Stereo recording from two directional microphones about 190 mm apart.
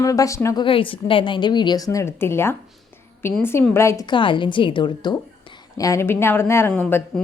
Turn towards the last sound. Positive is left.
turn(degrees=10)  # may be behind; listen again after turning